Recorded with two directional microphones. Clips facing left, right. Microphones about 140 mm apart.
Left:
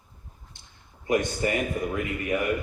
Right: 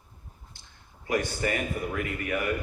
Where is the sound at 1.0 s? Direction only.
20° left (ahead or behind).